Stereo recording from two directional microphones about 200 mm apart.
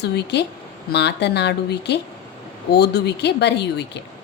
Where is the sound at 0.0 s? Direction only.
60° left (ahead or behind).